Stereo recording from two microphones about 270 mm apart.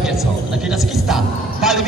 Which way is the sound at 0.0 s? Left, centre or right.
Centre.